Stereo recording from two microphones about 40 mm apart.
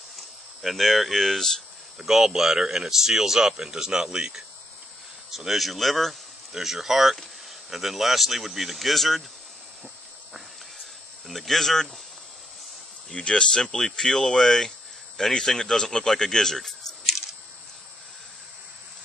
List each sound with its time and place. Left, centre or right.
0.6 s speech: centre
2.0 s speech: centre
6.5 s speech: centre
10.3 s snake: centre
13.1 s speech: left; by 17.2 s centre